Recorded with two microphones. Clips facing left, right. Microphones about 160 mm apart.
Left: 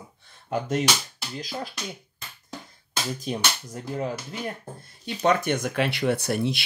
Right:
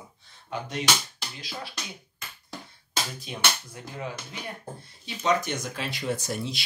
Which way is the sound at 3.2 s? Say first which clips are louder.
Left 3 dB; 40° left (ahead or behind).